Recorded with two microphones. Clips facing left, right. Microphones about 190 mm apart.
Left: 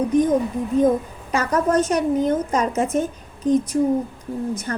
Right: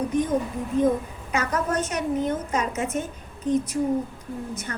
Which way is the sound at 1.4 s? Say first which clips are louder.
Left 6 dB; 35° left (ahead or behind).